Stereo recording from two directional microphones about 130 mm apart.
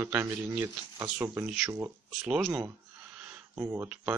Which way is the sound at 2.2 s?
Centre (ahead or behind).